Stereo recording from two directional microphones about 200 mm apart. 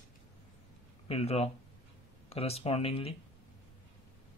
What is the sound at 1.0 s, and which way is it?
Speech, 30° left (ahead or behind).